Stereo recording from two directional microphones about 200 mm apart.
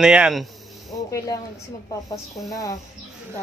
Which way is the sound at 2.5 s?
15° left (ahead or behind).